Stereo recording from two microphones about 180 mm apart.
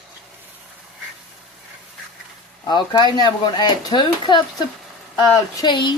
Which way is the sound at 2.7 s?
25° left (ahead or behind).